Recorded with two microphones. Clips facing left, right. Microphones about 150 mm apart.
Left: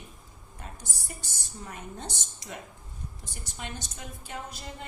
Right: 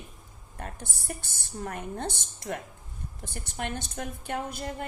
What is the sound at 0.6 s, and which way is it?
A woman's voice, 60° right (ahead or behind).